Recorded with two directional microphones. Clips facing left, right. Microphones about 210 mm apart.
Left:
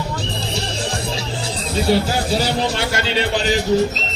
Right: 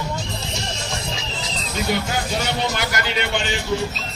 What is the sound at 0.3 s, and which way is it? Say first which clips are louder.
Music: left 5 dB; 35° left (ahead or behind).